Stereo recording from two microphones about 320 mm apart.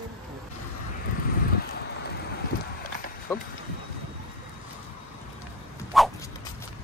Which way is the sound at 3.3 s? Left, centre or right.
Centre.